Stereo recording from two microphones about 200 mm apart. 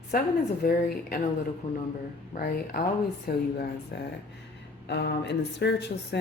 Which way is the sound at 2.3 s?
50° left (ahead or behind).